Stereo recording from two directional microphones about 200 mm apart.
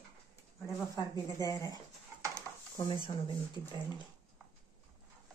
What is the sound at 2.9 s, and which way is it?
Speech, 25° left (ahead or behind).